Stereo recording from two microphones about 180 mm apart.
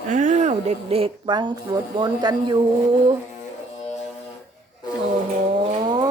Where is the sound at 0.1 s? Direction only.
40° right (ahead or behind); by 2.6 s 25° right (ahead or behind).